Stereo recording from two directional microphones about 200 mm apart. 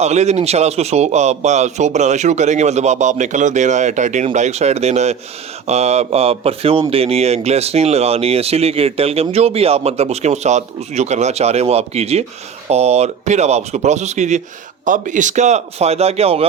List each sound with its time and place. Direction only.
0.0 s speech: 35° right (ahead or behind)